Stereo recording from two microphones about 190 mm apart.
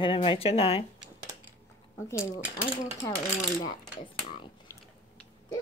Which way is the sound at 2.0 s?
15° left (ahead or behind).